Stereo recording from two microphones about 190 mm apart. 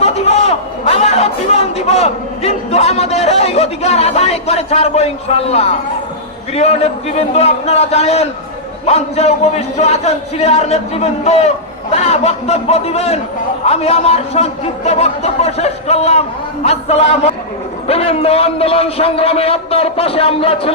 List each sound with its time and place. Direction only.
0.0 s a man's voice: 35° left (ahead or behind)